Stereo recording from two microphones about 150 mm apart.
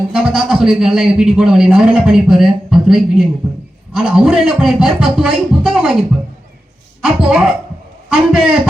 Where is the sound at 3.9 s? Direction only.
5° right (ahead or behind).